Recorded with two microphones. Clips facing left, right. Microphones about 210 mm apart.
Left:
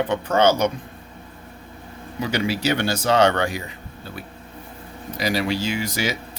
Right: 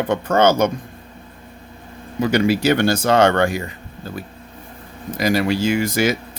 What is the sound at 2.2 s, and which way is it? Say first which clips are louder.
Speech: right 6 dB; 50° right (ahead or behind).